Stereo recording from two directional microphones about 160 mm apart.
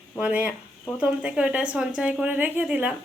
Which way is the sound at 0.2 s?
10° right (ahead or behind).